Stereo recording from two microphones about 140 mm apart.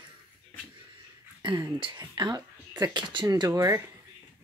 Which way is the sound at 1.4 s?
30° right (ahead or behind).